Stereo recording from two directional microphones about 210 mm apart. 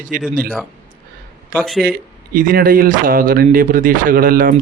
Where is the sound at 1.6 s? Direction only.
Centre (ahead or behind).